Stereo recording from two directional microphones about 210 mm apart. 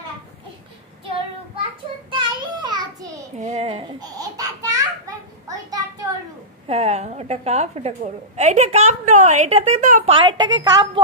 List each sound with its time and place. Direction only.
2.0 s child singing: 20° right (ahead or behind)
3.3 s a woman's voice: 30° right (ahead or behind)
4.0 s babbling: 15° right (ahead or behind)
6.7 s a woman's voice: 30° right (ahead or behind)